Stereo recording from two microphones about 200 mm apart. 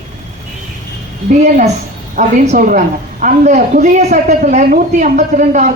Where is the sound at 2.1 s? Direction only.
40° right (ahead or behind).